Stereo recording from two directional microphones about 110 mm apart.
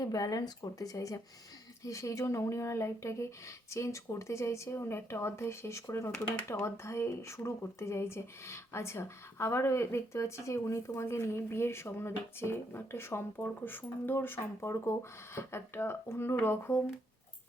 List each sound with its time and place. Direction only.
0.0 s speech: 35° left (ahead or behind)